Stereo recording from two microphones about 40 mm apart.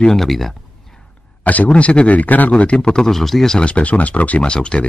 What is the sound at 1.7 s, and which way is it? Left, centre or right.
Speech, left.